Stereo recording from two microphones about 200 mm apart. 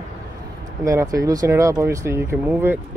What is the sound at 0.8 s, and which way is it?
Speech, 15° right (ahead or behind).